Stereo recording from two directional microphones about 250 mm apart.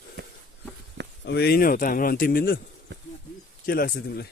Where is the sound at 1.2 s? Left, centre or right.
Left.